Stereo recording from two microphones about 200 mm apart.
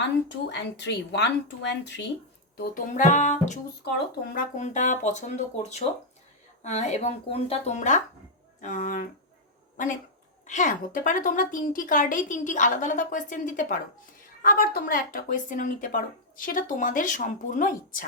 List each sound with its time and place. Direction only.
0.3 s speech: 60° left (ahead or behind)
2.6 s a woman's voice: 40° left (ahead or behind)